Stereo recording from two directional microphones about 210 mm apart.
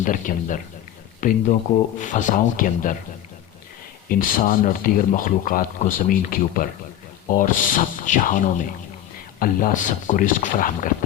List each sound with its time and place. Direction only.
0.0 s speech: 40° left (ahead or behind)
4.1 s speech: 40° left (ahead or behind)